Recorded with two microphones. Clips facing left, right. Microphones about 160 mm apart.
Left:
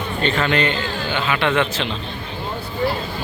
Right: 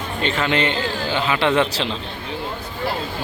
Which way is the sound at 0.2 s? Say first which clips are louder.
Left 1 dB; 20° right (ahead or behind).